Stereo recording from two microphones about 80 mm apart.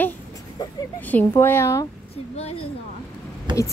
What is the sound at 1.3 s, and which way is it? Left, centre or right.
Speech, left.